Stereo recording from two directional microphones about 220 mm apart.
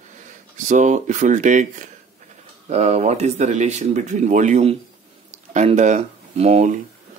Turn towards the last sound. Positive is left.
turn(degrees=-30)  # may be behind; listen again after turning